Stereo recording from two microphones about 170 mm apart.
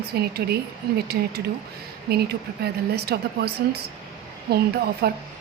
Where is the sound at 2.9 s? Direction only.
70° right (ahead or behind).